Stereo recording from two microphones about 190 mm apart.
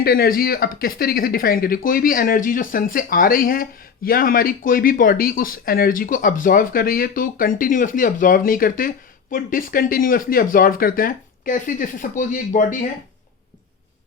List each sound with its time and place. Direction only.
0.0 s speech: 50° left (ahead or behind)